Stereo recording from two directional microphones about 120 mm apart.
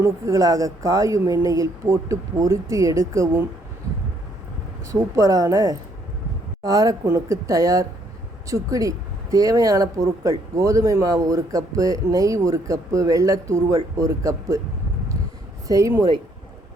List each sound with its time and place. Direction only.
0.0 s speech: 30° right (ahead or behind)
4.9 s speech: 25° right (ahead or behind)
15.6 s speech: 25° right (ahead or behind)